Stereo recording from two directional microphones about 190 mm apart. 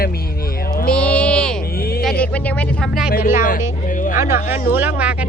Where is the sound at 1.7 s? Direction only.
50° left (ahead or behind).